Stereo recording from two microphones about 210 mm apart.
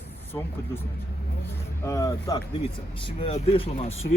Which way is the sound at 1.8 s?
15° left (ahead or behind).